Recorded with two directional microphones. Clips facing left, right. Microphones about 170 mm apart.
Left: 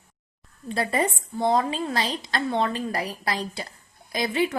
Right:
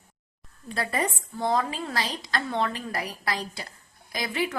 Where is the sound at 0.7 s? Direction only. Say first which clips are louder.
Left 4 dB; 25° left (ahead or behind).